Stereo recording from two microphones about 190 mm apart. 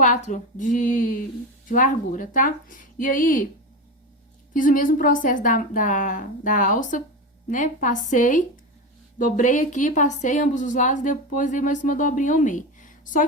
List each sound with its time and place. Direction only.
0.0 s a woman's voice: 40° left (ahead or behind)
4.5 s a woman's voice: 45° left (ahead or behind)